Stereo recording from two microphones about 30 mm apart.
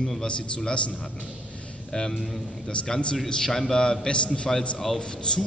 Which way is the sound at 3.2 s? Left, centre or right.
Left.